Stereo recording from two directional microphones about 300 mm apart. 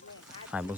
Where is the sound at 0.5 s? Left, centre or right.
Centre.